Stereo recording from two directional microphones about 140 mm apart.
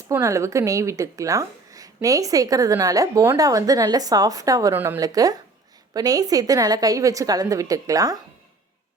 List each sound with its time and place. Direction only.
0.0 s a woman's voice: 20° right (ahead or behind)
4.9 s a woman's voice: 25° right (ahead or behind)